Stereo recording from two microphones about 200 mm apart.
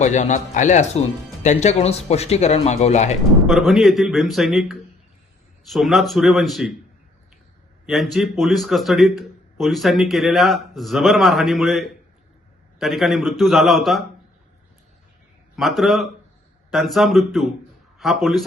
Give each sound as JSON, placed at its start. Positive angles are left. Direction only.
{"t": 0.0, "sound": "speech", "side_deg": 35}
{"t": 3.4, "sound": "a man's voice", "side_deg": 0}
{"t": 7.9, "sound": "a man's voice", "side_deg": 0}
{"t": 15.5, "sound": "a man's voice", "side_deg": 0}